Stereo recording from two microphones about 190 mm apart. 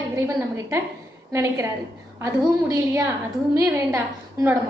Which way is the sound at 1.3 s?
15° right (ahead or behind).